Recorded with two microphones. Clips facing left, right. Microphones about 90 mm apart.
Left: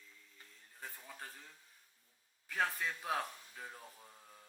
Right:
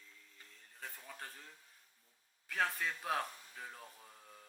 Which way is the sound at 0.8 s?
5° left (ahead or behind).